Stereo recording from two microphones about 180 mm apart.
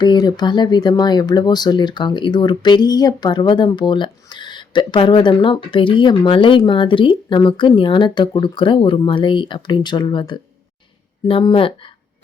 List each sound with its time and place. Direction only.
0.0 s speech: 25° left (ahead or behind)